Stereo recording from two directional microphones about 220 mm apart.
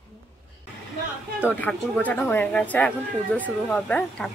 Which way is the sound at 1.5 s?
10° left (ahead or behind).